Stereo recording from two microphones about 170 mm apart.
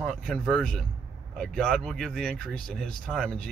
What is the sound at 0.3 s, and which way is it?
Speech, 5° left (ahead or behind).